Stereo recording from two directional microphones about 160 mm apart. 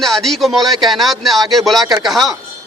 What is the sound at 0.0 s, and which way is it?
A man's voice, centre (ahead or behind).